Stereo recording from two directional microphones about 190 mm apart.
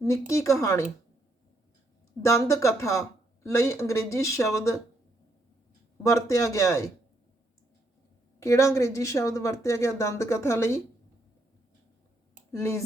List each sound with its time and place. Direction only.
0.0 s speech: 15° left (ahead or behind)
2.2 s speech: 15° left (ahead or behind)
6.0 s speech: 15° left (ahead or behind)
8.4 s speech: 15° left (ahead or behind)
12.5 s speech: 15° left (ahead or behind)